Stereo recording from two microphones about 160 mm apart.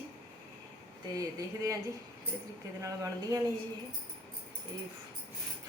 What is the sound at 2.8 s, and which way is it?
Speech, 20° right (ahead or behind).